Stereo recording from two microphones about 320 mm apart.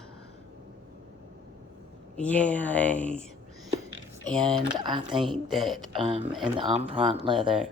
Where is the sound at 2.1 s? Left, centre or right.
Centre.